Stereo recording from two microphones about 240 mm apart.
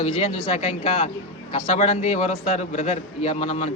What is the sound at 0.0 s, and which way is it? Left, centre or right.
A man's voice, left.